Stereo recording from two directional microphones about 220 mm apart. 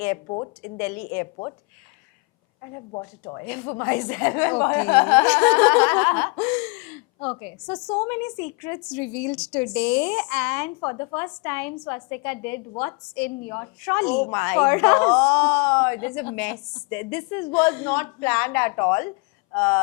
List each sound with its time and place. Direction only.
0.3 s speech: 25° left (ahead or behind)
0.8 s speech: 10° left (ahead or behind)
2.7 s speech: 20° left (ahead or behind)
10.7 s speech: 20° left (ahead or behind)